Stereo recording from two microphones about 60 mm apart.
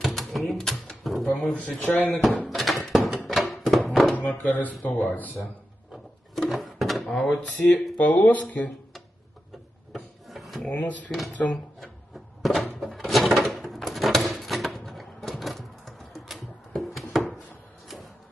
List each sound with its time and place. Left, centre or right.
0.0 s typewriter: centre
1.5 s speech: left
2.5 s a sound: centre
3.2 s music: centre
4.1 s speech: left
6.5 s drawer open or close: centre
7.3 s speech: left
9.9 s drawer open or close: centre
10.8 s speech: left
12.4 s cupboard open or close: centre
12.8 s drawer open or close: centre
17.8 s printer: centre